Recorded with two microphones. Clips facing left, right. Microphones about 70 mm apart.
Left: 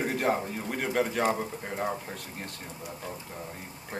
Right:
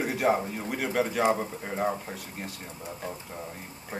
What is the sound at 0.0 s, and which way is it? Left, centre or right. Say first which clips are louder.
Speech: right 2 dB; centre.